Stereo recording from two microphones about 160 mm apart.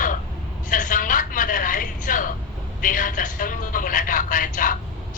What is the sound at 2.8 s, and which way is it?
Music, 55° left (ahead or behind).